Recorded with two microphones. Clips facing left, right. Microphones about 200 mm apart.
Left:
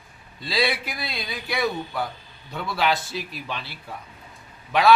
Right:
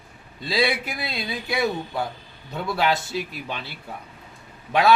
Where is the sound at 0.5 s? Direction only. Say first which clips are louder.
Right 2 dB; 20° right (ahead or behind).